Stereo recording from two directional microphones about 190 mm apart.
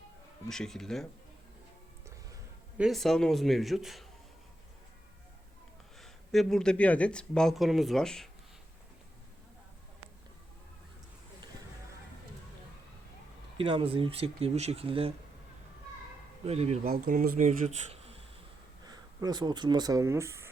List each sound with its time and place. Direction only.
0.4 s speech: centre (ahead or behind)
2.7 s speech: centre (ahead or behind)
6.0 s speech: centre (ahead or behind)
13.6 s speech: 25° right (ahead or behind)
16.5 s speech: 35° right (ahead or behind)
16.9 s speech: 50° right (ahead or behind)
17.9 s a sound: 30° right (ahead or behind)
18.9 s speech: 20° right (ahead or behind)